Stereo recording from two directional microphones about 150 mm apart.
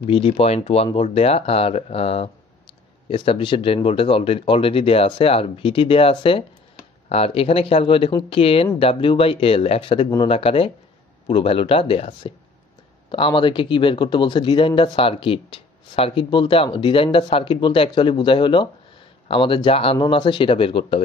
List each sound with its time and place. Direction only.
0.0 s speech: 40° left (ahead or behind)
13.1 s speech: 35° left (ahead or behind)